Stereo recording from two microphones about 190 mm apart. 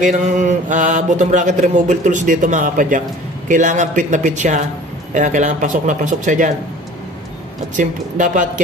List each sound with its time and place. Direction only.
0.0 s mantra: 40° right (ahead or behind)
7.7 s mantra: 40° right (ahead or behind)